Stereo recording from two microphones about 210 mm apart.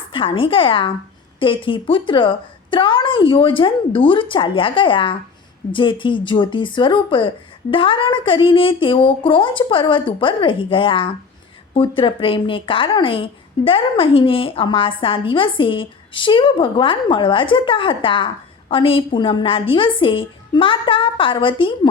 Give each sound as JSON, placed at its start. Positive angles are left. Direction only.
{"t": 0.1, "sound": "speech", "side_deg": 25}